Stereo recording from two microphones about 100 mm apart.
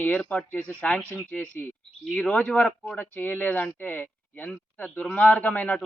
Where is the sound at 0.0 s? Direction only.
15° left (ahead or behind).